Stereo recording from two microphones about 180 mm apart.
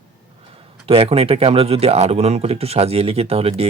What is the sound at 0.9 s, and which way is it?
Speech, 35° right (ahead or behind).